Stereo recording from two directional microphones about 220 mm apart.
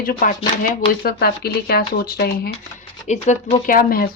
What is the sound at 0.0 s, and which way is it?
Speech, 40° left (ahead or behind).